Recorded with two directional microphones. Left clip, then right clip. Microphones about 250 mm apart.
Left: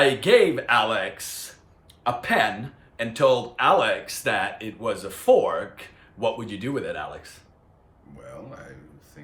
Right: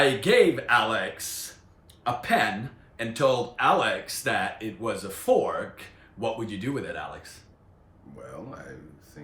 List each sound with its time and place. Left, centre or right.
0.0 s speech: centre
8.1 s speech: centre